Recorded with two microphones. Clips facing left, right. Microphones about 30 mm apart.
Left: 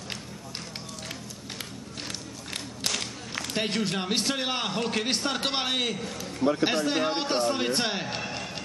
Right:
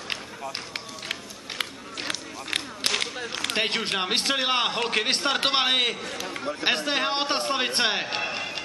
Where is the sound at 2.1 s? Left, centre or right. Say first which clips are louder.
Right 9 dB; right.